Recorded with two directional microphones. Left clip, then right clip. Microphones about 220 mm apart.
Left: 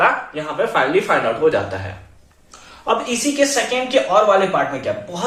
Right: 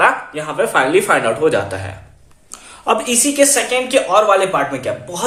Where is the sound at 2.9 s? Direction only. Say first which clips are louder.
Right 3 dB; 45° right (ahead or behind).